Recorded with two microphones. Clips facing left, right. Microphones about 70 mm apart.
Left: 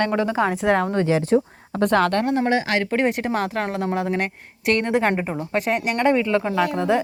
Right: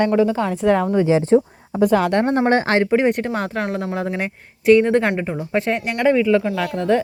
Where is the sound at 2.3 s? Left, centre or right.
Right.